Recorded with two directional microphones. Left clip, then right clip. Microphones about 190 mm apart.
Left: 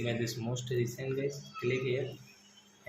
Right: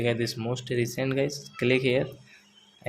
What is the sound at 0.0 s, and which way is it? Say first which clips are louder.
Speech: right 8 dB; 35° right (ahead or behind).